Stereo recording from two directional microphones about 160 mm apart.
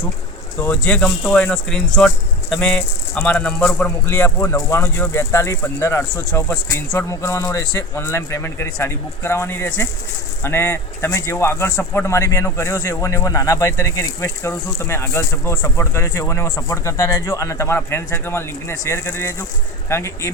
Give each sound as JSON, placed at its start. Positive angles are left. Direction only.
{"t": 0.6, "sound": "speech", "side_deg": 10}